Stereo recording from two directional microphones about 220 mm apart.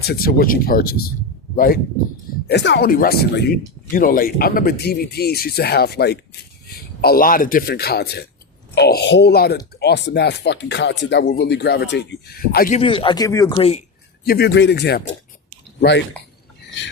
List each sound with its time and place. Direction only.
0.0 s speech: 45° left (ahead or behind)
12.8 s speech: 25° left (ahead or behind)
14.3 s speech: 45° left (ahead or behind)